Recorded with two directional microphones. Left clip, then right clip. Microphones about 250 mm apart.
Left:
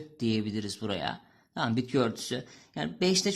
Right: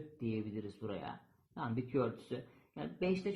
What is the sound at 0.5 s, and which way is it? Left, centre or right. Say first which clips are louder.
A man's voice: left 9 dB; left.